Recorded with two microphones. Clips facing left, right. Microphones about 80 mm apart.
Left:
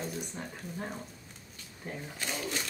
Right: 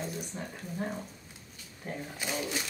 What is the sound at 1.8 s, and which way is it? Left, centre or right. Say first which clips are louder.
Speech: right 2 dB; centre.